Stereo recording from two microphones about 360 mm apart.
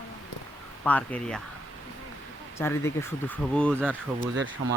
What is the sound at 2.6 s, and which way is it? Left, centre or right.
Speech, centre.